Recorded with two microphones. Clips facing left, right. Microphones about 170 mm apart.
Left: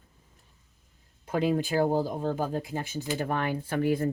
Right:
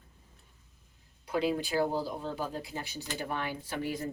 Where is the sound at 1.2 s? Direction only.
45° left (ahead or behind).